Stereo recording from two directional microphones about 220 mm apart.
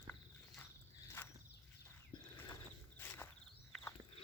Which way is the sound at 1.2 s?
10° left (ahead or behind).